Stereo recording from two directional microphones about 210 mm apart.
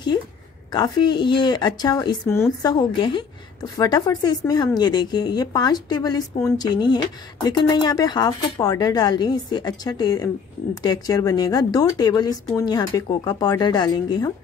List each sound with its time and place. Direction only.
0.7 s a woman's voice: 20° left (ahead or behind)